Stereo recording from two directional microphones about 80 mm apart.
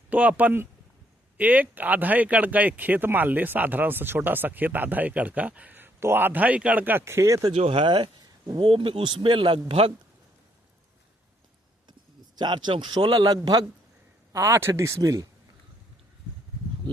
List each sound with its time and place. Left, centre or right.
0.1 s speech: centre
7.0 s speech: right
7.8 s speech: right
8.5 s speech: right
12.4 s speech: right
13.2 s a man's voice: right
14.3 s speech: right
16.8 s a sound: right